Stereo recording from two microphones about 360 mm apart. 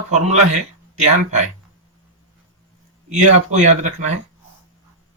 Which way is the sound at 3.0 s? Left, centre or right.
Centre.